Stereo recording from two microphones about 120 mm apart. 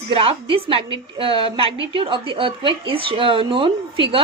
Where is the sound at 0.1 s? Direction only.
50° right (ahead or behind).